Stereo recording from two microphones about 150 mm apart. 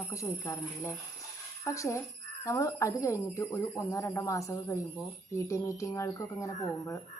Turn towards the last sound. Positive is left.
turn(degrees=20)  # may be behind; listen again after turning